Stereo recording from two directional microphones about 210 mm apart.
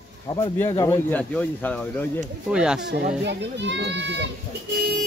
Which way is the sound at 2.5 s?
5° right (ahead or behind).